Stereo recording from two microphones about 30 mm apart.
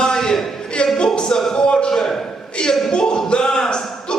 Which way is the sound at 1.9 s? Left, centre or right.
Centre.